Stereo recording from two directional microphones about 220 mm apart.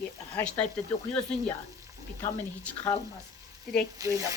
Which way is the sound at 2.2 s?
15° left (ahead or behind).